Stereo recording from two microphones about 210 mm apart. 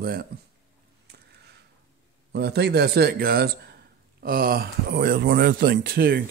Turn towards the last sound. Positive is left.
turn(degrees=-45)  # may be behind; listen again after turning